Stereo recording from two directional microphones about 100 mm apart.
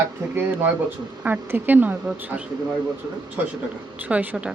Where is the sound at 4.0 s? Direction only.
15° right (ahead or behind).